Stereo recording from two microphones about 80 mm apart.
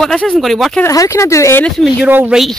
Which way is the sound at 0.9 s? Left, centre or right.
Left.